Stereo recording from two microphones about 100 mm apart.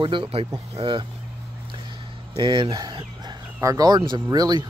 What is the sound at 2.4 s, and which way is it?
Speech, 50° right (ahead or behind).